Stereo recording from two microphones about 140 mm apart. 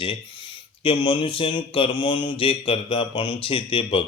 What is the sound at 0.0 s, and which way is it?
Speech, 40° left (ahead or behind).